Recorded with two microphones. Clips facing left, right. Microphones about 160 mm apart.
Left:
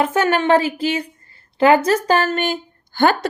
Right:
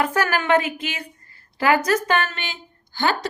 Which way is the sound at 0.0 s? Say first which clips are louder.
Left 5 dB; 25° left (ahead or behind).